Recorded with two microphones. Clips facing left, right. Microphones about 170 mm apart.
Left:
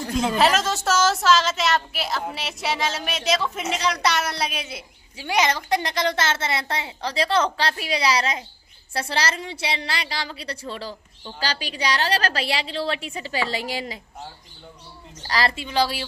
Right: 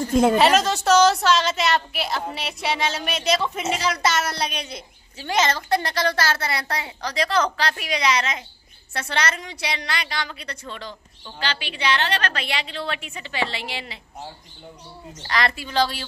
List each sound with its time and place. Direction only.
0.1 s a woman's voice: 55° right (ahead or behind)
0.4 s a woman's voice: centre (ahead or behind); by 13.9 s 40° left (ahead or behind)
15.2 s a woman's voice: 30° left (ahead or behind)
15.7 s a woman's voice: 10° left (ahead or behind)